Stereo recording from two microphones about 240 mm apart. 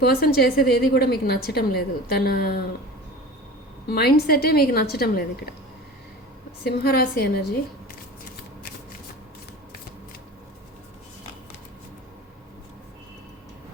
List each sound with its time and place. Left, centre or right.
0.0 s a woman's voice: left
3.8 s a woman's voice: left
6.7 s a woman's voice: left